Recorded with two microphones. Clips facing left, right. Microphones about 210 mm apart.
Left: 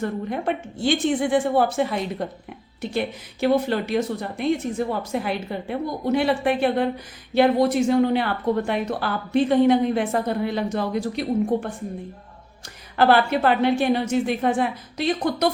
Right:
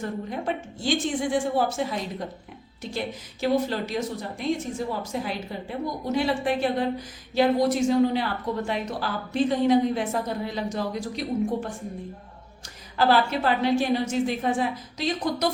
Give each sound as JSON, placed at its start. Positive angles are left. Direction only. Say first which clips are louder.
{"t": 0.0, "sound": "a woman's voice", "louder": "left 4 dB", "side_deg": 60}
{"t": 13.0, "sound": "a woman's voice", "louder": "left 4 dB", "side_deg": 60}